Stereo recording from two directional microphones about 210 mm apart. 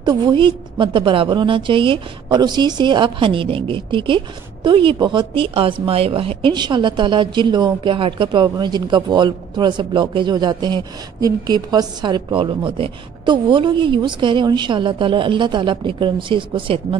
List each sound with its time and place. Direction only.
0.0 s a woman's voice: 20° right (ahead or behind)